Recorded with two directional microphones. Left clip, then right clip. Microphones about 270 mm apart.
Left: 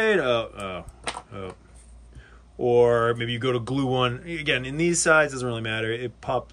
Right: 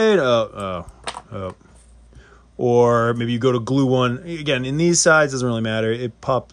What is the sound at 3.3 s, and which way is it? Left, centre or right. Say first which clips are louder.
A man's voice: right 6 dB; centre.